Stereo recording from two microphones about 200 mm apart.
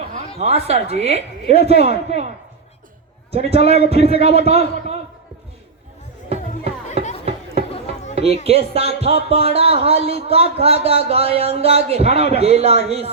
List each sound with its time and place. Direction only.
0.2 s a man's voice: 30° right (ahead or behind)
3.3 s a man's voice: 30° right (ahead or behind)
6.2 s music: 30° right (ahead or behind)
7.0 s a sound: 30° right (ahead or behind)
8.4 s a man's voice: 30° right (ahead or behind)